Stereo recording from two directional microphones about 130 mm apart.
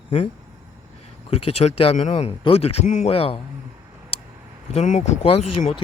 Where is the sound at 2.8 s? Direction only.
70° left (ahead or behind).